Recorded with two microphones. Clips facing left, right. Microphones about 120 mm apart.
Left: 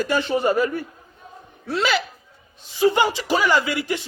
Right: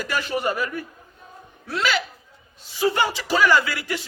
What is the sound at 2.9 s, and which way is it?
A man's voice, 20° left (ahead or behind).